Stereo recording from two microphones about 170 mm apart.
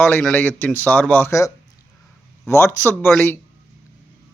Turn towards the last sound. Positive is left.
turn(degrees=10)  # may be behind; listen again after turning